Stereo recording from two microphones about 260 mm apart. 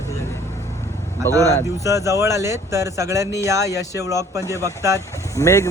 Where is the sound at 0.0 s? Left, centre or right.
Centre.